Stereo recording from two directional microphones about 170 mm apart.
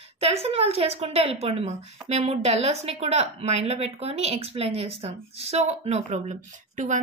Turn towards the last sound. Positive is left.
turn(degrees=-45)  # may be behind; listen again after turning